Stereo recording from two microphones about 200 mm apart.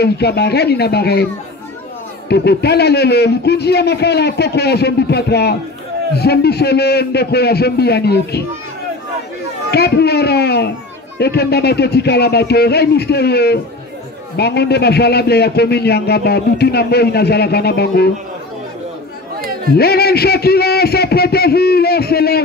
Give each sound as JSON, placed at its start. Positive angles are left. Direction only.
{"t": 0.0, "sound": "a man's voice", "side_deg": 55}
{"t": 2.2, "sound": "a man's voice", "side_deg": 55}
{"t": 9.7, "sound": "a man's voice", "side_deg": 55}
{"t": 19.7, "sound": "a man's voice", "side_deg": 50}